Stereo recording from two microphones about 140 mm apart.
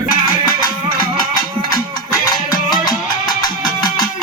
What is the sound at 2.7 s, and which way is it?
Music, 30° left (ahead or behind).